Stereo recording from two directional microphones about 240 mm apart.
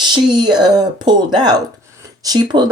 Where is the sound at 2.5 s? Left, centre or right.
Right.